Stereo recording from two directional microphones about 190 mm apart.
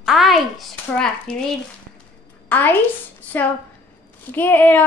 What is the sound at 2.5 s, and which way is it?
Speech, 10° left (ahead or behind).